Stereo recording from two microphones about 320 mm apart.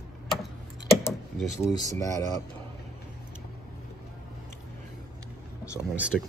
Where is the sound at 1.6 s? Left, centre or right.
Centre.